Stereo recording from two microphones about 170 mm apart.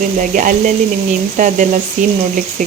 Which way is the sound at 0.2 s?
50° right (ahead or behind).